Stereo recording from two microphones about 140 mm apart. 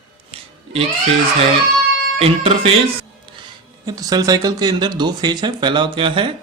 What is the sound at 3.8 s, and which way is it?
Speech, 25° right (ahead or behind).